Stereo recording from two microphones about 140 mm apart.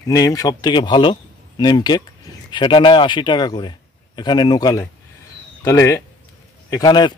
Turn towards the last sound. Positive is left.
turn(degrees=35)  # may be behind; listen again after turning